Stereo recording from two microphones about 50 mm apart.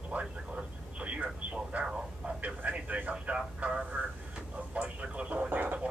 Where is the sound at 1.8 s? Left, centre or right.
Right.